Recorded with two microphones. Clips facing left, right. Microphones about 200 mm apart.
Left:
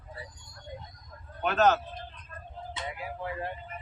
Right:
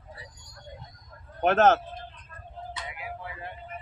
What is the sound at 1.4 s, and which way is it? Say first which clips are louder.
Speech: right 4 dB; 55° right (ahead or behind).